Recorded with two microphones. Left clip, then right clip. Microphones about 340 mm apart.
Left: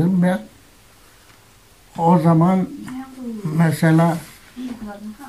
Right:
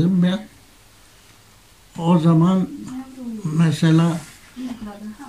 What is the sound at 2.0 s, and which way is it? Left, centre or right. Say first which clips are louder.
Speech: left 3 dB; centre.